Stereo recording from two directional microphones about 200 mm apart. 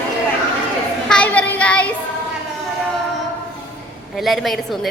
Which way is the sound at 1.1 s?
5° left (ahead or behind).